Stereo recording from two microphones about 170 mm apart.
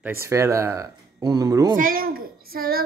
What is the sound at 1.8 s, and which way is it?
A child's voice, 60° right (ahead or behind).